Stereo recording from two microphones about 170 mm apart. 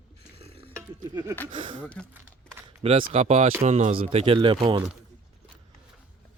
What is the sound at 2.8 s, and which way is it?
Speech, 35° right (ahead or behind).